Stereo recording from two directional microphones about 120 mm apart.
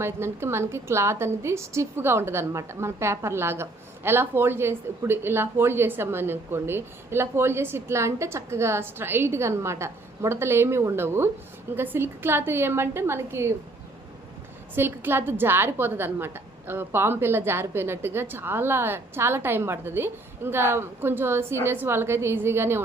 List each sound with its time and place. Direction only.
0.0 s a woman's voice: 20° right (ahead or behind)
14.8 s a woman's voice: 20° right (ahead or behind)